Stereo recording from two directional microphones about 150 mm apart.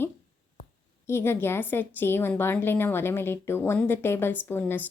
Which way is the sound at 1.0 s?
15° left (ahead or behind).